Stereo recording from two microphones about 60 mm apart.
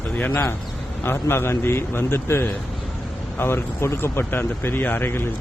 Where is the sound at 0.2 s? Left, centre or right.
Left.